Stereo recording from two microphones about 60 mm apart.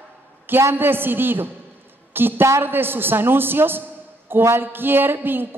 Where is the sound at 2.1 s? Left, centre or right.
Right.